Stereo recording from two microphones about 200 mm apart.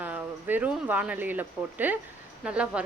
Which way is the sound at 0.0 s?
10° right (ahead or behind).